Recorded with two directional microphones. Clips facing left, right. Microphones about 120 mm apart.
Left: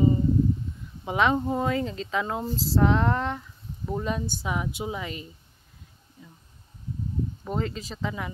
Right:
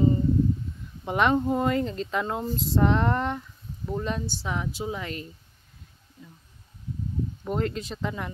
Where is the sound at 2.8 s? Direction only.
Centre (ahead or behind).